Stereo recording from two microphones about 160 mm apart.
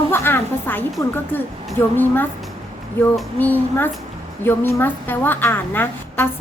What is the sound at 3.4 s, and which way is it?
A woman's voice, 10° left (ahead or behind).